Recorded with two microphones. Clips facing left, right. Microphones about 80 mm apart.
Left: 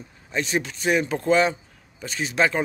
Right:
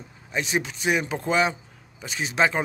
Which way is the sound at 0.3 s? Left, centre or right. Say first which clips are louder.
Left 1 dB; centre.